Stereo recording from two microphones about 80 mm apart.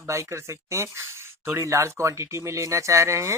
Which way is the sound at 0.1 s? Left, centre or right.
Right.